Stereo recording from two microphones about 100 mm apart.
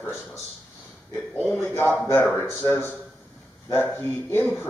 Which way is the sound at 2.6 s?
20° left (ahead or behind).